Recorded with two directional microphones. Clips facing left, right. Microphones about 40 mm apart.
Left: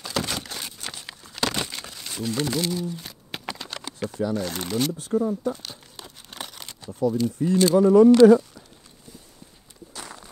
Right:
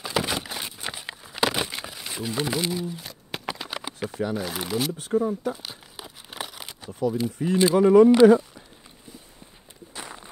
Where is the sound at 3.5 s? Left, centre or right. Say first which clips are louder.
Right 2 dB; centre.